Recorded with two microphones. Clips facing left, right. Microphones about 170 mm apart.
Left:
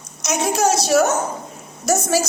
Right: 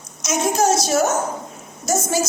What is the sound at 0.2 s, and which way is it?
A woman's voice, 65° left (ahead or behind).